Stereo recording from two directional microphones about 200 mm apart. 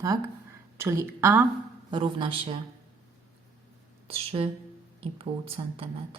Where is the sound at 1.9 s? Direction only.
25° right (ahead or behind).